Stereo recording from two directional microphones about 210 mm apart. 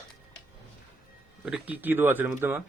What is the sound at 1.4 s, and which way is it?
Speech, 5° right (ahead or behind).